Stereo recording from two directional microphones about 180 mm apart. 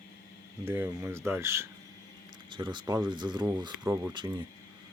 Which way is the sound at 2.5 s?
25° right (ahead or behind).